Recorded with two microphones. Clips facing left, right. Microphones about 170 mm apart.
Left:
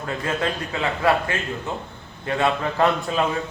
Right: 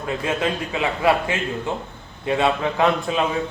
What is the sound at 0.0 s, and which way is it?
A man's voice, 10° right (ahead or behind).